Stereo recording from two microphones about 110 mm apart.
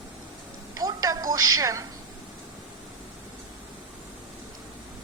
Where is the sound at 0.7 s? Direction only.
30° right (ahead or behind).